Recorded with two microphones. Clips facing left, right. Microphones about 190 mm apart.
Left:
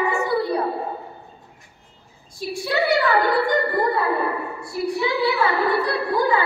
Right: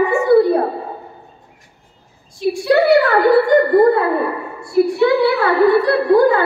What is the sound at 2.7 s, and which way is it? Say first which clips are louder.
Speech: right 7 dB; 55° right (ahead or behind).